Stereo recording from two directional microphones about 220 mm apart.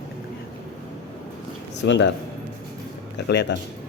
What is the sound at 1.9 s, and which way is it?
Speech, 55° left (ahead or behind).